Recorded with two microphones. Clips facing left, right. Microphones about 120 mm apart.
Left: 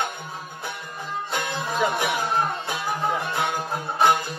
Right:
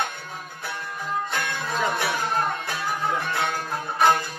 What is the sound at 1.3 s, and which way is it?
Music, 15° left (ahead or behind).